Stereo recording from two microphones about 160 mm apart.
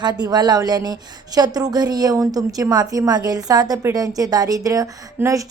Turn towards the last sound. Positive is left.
turn(degrees=-20)  # may be behind; listen again after turning